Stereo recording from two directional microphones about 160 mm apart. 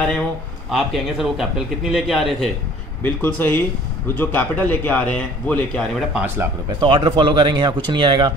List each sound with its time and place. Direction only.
0.7 s a man's voice: centre (ahead or behind)
3.0 s speech: 10° left (ahead or behind)
6.2 s speech: 15° right (ahead or behind)
6.8 s speech: 30° right (ahead or behind)